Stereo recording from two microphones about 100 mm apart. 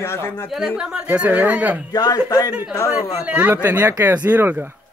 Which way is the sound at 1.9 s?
40° left (ahead or behind).